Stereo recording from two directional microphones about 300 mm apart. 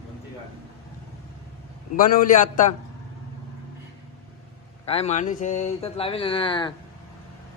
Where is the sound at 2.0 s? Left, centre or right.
Left.